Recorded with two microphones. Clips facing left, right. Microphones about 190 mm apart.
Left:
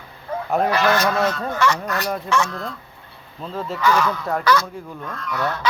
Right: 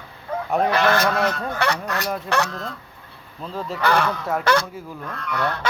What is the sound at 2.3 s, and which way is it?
Speech, 65° right (ahead or behind).